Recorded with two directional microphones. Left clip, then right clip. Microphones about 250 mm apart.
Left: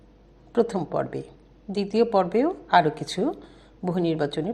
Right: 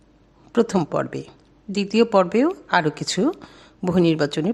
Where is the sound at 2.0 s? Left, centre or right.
Right.